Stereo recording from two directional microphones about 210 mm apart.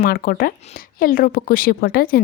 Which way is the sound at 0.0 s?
45° left (ahead or behind).